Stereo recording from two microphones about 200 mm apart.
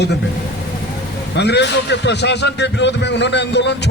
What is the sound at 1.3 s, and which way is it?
A man's voice, 55° left (ahead or behind).